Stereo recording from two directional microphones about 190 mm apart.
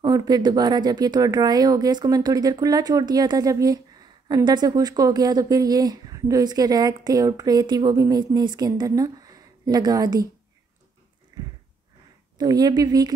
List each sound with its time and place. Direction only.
0.0 s speech: 20° right (ahead or behind)
12.4 s speech: 20° right (ahead or behind)